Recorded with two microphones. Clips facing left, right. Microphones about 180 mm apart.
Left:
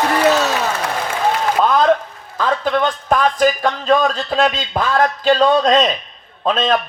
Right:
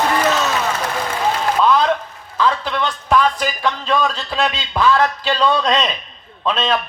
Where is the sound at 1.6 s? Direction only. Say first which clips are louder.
Left 2 dB; 50° left (ahead or behind).